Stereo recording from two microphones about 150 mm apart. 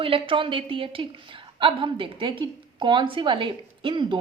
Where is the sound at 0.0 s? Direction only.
35° right (ahead or behind).